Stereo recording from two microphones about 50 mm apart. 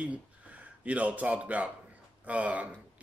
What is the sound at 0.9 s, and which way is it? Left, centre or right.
Speech, right.